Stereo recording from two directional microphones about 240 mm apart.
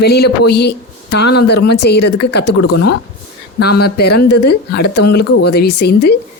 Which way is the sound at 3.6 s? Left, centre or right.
Left.